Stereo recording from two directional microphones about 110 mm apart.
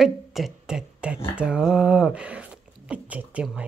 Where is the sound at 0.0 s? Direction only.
Centre (ahead or behind).